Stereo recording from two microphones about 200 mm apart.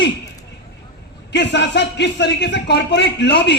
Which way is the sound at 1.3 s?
60° left (ahead or behind).